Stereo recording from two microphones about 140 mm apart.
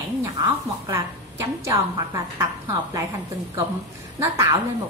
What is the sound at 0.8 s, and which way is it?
A woman's voice, 20° right (ahead or behind).